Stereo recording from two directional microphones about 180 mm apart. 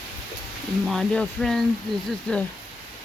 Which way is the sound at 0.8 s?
Centre (ahead or behind).